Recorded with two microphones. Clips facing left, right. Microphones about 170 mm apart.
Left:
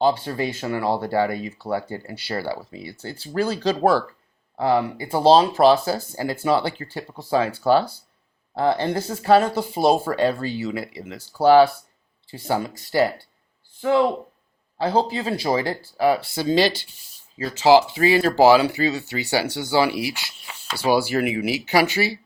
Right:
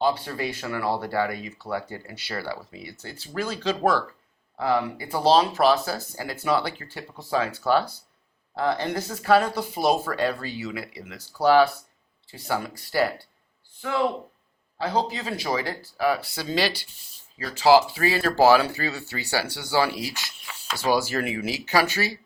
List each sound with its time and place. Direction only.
0.0 s speech: 30° left (ahead or behind)
14.8 s speech: 30° left (ahead or behind); by 22.1 s 15° left (ahead or behind)